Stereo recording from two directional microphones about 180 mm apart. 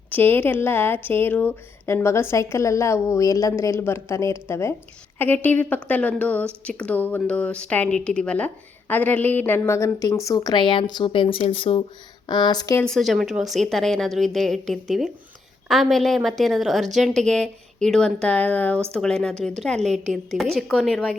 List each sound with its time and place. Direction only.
0.1 s speech: 10° left (ahead or behind)
12.8 s speech: centre (ahead or behind)